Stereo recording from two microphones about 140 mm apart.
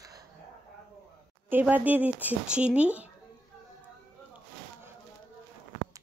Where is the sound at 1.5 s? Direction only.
10° right (ahead or behind).